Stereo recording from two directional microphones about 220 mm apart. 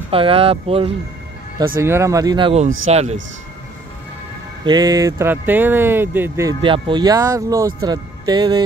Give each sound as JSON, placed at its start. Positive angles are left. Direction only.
{"t": 0.1, "sound": "speech", "side_deg": -25}
{"t": 1.8, "sound": "speech", "side_deg": -10}
{"t": 4.6, "sound": "speech", "side_deg": -20}